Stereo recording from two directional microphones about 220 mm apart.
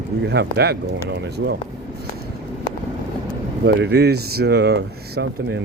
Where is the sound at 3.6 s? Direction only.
50° right (ahead or behind).